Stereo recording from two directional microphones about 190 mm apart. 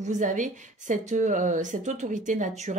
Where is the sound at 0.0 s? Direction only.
40° right (ahead or behind).